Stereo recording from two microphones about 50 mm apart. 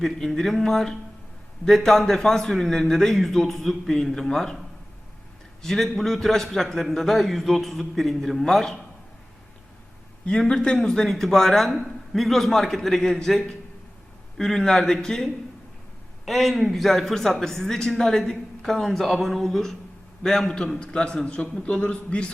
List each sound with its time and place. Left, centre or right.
0.0 s a man's voice: centre
5.6 s a man's voice: centre
10.5 s a man's voice: centre